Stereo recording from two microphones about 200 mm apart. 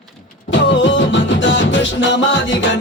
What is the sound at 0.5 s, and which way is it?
Music, 65° left (ahead or behind).